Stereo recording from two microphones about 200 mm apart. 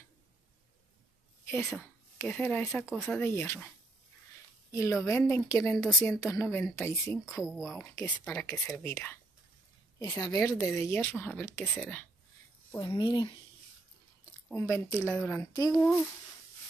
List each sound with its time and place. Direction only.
1.5 s a woman's voice: 10° left (ahead or behind)
3.2 s a woman's voice: 10° left (ahead or behind)
4.7 s a woman's voice: 15° left (ahead or behind)
7.4 s speech: centre (ahead or behind)
7.8 s a woman's voice: 15° left (ahead or behind)
12.7 s speech: 20° left (ahead or behind)
14.5 s a woman's voice: 10° left (ahead or behind)